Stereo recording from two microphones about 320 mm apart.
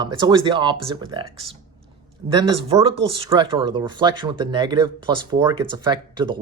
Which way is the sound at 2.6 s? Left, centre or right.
Centre.